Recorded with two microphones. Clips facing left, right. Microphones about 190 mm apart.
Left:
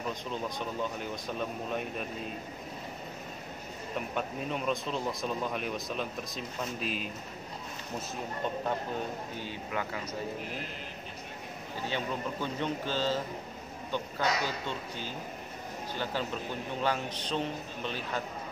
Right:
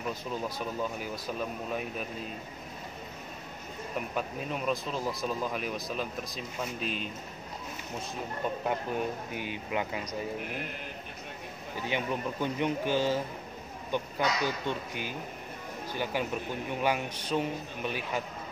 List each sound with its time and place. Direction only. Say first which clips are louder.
0.1 s speech: right 1 dB; 5° right (ahead or behind)
4.1 s speech: left 2 dB; centre (ahead or behind)
9.3 s a man's voice: right 3 dB; 15° right (ahead or behind)
11.9 s a man's voice: right 3 dB; 15° right (ahead or behind)